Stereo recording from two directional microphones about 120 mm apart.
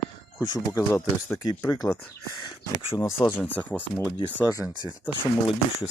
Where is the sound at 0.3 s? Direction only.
35° left (ahead or behind); by 4.1 s 15° left (ahead or behind).